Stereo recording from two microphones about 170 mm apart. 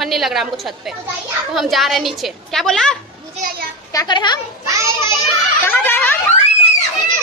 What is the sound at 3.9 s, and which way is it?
Speech, 25° left (ahead or behind).